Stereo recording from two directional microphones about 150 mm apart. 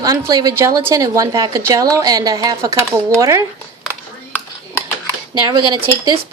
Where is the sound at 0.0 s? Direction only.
25° right (ahead or behind).